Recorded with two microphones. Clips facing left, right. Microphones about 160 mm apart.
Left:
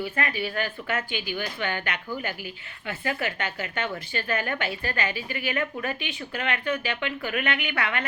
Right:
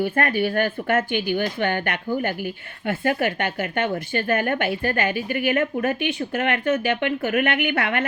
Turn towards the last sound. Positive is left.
turn(degrees=-50)  # may be behind; listen again after turning